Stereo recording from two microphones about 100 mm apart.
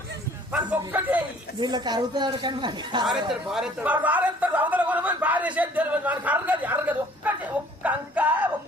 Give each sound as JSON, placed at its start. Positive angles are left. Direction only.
{"t": 0.5, "sound": "speech", "side_deg": -15}
{"t": 1.5, "sound": "speech", "side_deg": -45}
{"t": 3.1, "sound": "speech", "side_deg": 0}
{"t": 3.8, "sound": "a sound", "side_deg": -15}
{"t": 7.9, "sound": "music", "side_deg": -15}